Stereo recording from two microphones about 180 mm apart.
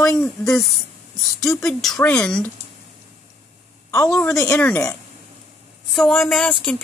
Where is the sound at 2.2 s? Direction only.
5° left (ahead or behind).